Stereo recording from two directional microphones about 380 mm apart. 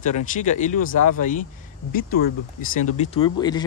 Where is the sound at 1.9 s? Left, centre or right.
Left.